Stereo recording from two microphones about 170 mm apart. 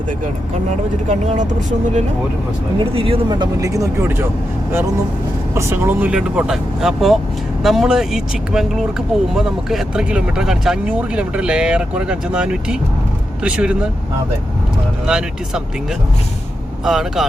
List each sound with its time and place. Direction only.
1.0 s speech: 45° right (ahead or behind)
2.7 s speech: 35° right (ahead or behind); by 4.3 s 15° right (ahead or behind)
5.5 s speech: 15° right (ahead or behind)
15.0 s speech: 5° right (ahead or behind)
16.8 s speech: centre (ahead or behind)